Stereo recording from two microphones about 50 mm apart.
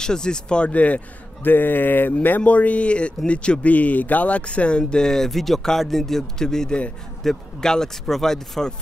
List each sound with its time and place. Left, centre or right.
0.0 s a man's voice: centre